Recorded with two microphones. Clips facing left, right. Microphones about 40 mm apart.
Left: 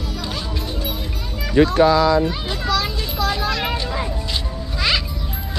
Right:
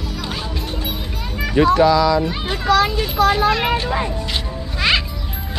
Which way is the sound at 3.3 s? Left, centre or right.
Right.